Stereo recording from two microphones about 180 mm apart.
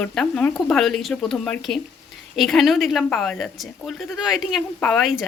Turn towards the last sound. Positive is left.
turn(degrees=0)  # may be behind; listen again after turning